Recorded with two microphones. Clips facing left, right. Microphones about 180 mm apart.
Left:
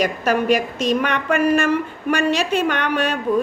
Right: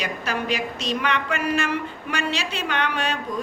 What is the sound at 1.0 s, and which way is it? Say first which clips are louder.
A woman's voice: left 6 dB; 55° left (ahead or behind).